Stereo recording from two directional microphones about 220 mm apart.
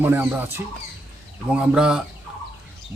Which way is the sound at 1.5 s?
5° right (ahead or behind).